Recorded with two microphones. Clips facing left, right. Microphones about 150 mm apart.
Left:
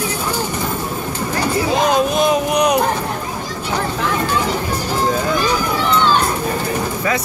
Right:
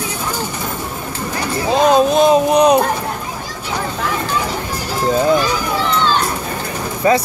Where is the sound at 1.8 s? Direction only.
30° right (ahead or behind).